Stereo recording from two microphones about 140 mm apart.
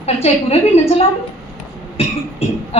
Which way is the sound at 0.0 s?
50° left (ahead or behind).